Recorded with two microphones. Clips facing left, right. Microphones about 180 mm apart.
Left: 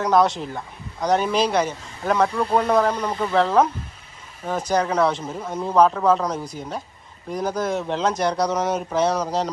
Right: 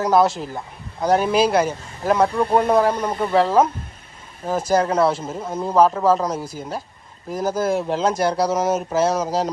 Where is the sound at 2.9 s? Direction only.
50° right (ahead or behind).